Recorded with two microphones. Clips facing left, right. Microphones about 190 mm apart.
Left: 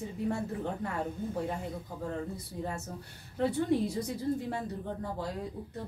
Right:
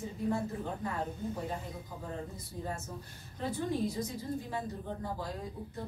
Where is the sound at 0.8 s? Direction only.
65° left (ahead or behind).